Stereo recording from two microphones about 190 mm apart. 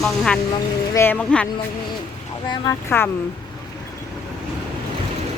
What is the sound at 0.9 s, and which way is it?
Speech, 10° left (ahead or behind).